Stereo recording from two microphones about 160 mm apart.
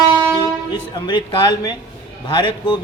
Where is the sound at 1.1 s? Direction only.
25° left (ahead or behind).